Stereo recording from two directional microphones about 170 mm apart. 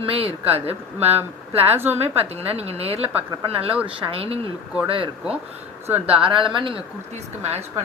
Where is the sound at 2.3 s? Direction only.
35° right (ahead or behind).